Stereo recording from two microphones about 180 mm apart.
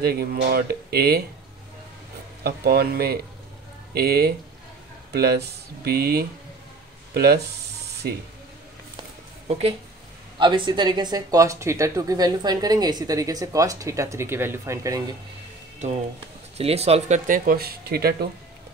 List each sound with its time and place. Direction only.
0.0 s speech: 60° right (ahead or behind)
2.4 s speech: 60° right (ahead or behind)
9.5 s speech: 35° right (ahead or behind); by 15.0 s 20° right (ahead or behind)
16.5 s speech: 35° right (ahead or behind)
17.3 s speech: 55° right (ahead or behind)